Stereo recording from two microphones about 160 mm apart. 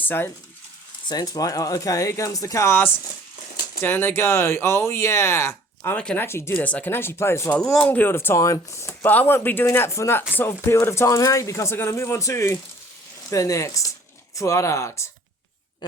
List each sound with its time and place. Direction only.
0.0 s speech: 15° left (ahead or behind)
1.0 s speech: 25° left (ahead or behind)